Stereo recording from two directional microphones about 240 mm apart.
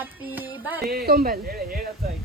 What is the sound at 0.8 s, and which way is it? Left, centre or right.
Speech, right.